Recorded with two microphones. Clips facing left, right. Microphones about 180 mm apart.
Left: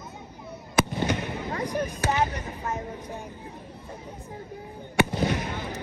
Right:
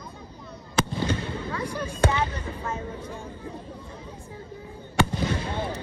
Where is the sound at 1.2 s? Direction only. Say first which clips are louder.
Left 1 dB; 15° left (ahead or behind).